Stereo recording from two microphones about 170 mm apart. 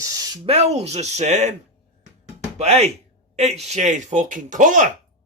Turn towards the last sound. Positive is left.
turn(degrees=-50)  # may be behind; listen again after turning